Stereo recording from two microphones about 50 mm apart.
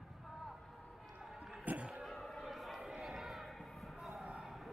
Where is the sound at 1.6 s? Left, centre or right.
Right.